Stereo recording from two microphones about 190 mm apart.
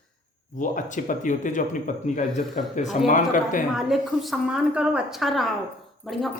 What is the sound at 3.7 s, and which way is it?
A woman's voice, centre (ahead or behind).